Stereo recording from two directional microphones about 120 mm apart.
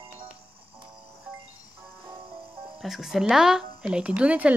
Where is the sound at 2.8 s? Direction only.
Centre (ahead or behind).